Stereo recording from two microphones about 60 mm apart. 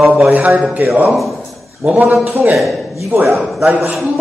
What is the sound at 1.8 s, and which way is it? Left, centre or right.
Speech, right.